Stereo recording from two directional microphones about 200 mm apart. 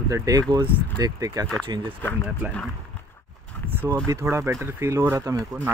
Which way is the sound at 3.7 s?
10° right (ahead or behind).